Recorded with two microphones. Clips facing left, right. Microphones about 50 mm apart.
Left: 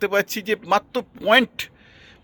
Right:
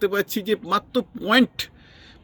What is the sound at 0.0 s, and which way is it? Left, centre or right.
Speech, left.